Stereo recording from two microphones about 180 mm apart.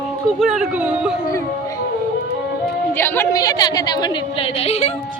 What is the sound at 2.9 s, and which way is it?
A woman's voice, 15° left (ahead or behind).